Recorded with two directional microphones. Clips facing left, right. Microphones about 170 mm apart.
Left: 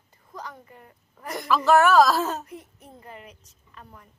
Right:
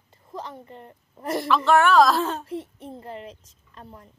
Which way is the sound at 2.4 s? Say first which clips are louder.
Right 9 dB; 30° right (ahead or behind).